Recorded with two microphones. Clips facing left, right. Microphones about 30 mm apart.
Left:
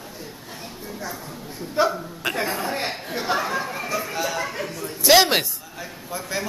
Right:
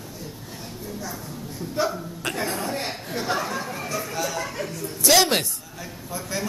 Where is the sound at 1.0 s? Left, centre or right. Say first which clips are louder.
Left 1 dB; left.